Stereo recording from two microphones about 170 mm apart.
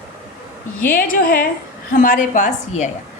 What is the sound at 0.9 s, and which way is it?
A woman's voice, 55° left (ahead or behind).